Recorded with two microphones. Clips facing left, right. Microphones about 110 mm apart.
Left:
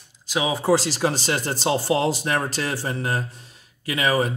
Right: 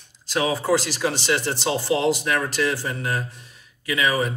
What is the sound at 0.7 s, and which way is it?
Speech, 35° left (ahead or behind).